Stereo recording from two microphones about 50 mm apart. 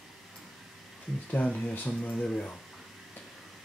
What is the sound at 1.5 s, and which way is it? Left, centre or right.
Speech, centre.